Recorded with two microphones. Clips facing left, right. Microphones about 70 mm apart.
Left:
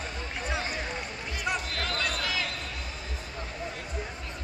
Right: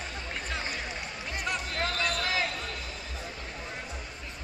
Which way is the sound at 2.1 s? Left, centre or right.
Right.